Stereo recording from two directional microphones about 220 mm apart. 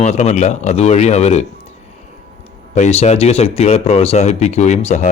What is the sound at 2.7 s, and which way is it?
Speech, 30° left (ahead or behind).